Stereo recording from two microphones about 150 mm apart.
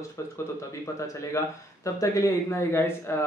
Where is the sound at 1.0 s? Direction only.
20° left (ahead or behind).